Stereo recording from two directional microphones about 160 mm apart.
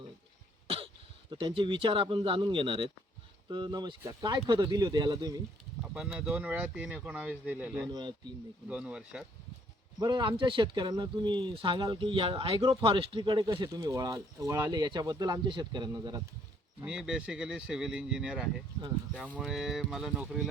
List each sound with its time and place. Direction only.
1.3 s speech: 30° right (ahead or behind)
5.8 s speech: 5° right (ahead or behind)
10.0 s speech: 25° right (ahead or behind)
16.8 s speech: 5° right (ahead or behind)